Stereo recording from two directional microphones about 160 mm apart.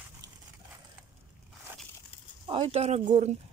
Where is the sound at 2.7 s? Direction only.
45° right (ahead or behind).